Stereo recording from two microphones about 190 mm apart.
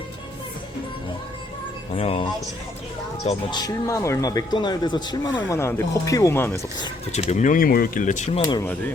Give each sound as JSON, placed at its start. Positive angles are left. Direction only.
{"t": 2.0, "sound": "speech", "side_deg": 30}
{"t": 3.5, "sound": "speech", "side_deg": 20}
{"t": 7.1, "sound": "speech", "side_deg": 35}
{"t": 8.4, "sound": "speech", "side_deg": 20}